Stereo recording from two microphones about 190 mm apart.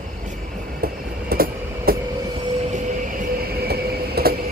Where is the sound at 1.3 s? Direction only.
50° right (ahead or behind).